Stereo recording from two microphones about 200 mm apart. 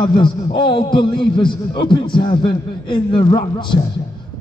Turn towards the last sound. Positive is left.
turn(degrees=25)  # may be behind; listen again after turning